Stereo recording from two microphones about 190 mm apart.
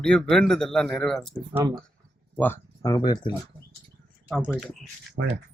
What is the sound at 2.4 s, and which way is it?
Speech, 15° left (ahead or behind).